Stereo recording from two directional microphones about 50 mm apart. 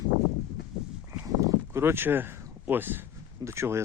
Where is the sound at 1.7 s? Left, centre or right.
Right.